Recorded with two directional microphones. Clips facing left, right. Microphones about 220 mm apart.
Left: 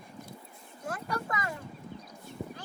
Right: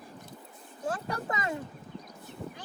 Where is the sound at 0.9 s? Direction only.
30° right (ahead or behind).